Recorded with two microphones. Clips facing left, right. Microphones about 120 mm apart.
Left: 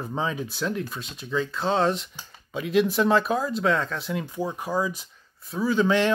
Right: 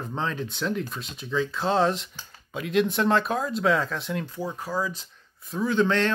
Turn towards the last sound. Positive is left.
turn(degrees=10)  # may be behind; listen again after turning